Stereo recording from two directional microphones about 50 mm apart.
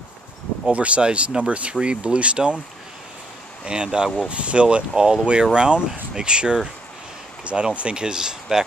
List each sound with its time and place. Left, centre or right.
0.7 s speech: right
3.6 s speech: centre